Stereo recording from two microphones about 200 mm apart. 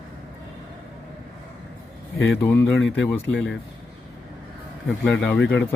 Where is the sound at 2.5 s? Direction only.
5° left (ahead or behind).